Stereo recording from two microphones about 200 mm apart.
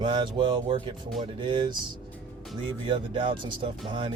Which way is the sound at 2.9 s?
25° right (ahead or behind).